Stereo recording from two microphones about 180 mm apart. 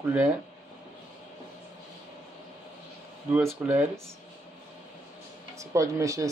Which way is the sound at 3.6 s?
5° right (ahead or behind).